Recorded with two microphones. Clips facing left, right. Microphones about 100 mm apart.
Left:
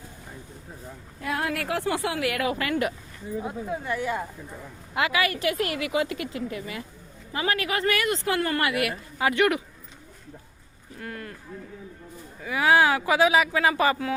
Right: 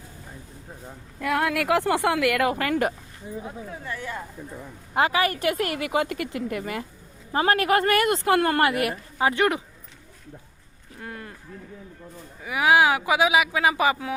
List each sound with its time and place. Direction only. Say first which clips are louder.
1.2 s speech: right 4 dB; 65° right (ahead or behind); by 2.9 s 45° right (ahead or behind)
3.4 s speech: left 5 dB; 15° left (ahead or behind)
4.9 s a woman's voice: right 3 dB; 35° right (ahead or behind)
11.0 s speech: left 1 dB; 15° right (ahead or behind)
12.4 s speech: right 1 dB; 15° right (ahead or behind)